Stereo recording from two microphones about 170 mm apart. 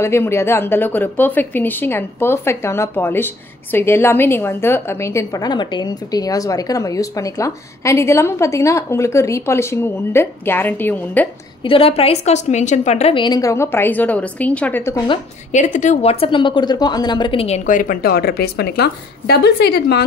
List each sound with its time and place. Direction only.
0.0 s a woman's voice: 15° left (ahead or behind)
11.6 s a woman's voice: 30° left (ahead or behind); by 15.0 s 15° left (ahead or behind)
15.5 s a woman's voice: 45° left (ahead or behind)
17.6 s a woman's voice: 55° left (ahead or behind); by 20.0 s 75° left (ahead or behind)